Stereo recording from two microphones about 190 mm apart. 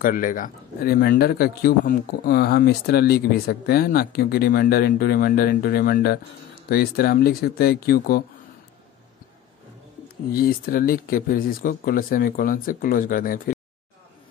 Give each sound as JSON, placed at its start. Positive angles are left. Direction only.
{"t": 0.0, "sound": "speech", "side_deg": 45}
{"t": 10.3, "sound": "speech", "side_deg": 50}